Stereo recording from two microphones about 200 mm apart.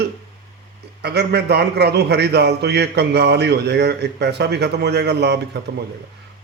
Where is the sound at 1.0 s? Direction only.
55° right (ahead or behind).